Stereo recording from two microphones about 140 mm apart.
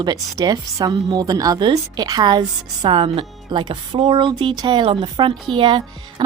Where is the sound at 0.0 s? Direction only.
30° right (ahead or behind).